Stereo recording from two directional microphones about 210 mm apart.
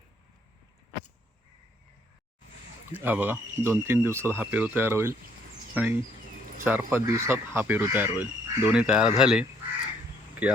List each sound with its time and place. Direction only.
2.9 s speech: 10° right (ahead or behind)